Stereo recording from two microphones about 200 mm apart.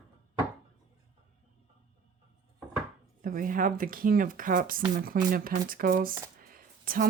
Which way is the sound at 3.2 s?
45° right (ahead or behind).